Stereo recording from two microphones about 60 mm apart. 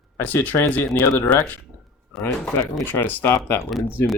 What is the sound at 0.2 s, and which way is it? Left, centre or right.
Speech, left.